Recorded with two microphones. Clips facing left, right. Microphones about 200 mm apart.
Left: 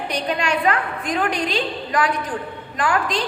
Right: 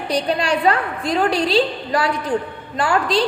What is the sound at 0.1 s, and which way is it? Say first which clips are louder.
A woman's voice: right 4 dB; 35° right (ahead or behind).